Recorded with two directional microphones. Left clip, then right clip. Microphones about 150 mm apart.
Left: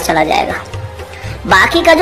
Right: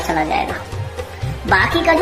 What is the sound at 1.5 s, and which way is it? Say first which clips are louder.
Speech: left 6 dB; 50° left (ahead or behind).